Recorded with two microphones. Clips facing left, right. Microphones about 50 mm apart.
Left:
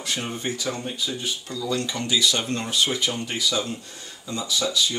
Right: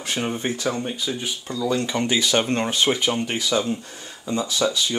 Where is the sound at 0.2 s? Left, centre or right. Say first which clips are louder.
Right 4 dB; centre.